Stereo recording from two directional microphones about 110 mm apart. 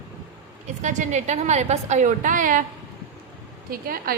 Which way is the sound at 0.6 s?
90° right.